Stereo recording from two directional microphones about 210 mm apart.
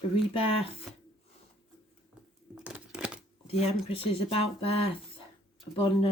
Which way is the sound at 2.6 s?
5° right (ahead or behind).